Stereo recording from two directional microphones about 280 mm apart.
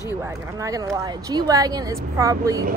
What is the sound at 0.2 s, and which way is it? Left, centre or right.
Speech, centre.